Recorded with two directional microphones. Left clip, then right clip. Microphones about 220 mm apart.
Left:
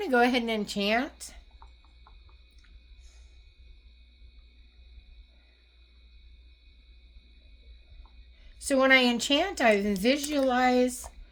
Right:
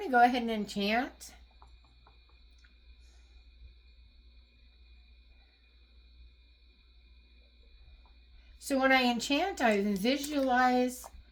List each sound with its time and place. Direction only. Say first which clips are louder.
0.0 s a woman's voice: left 1 dB; 40° left (ahead or behind)
8.5 s a woman's voice: left 5 dB; 40° left (ahead or behind)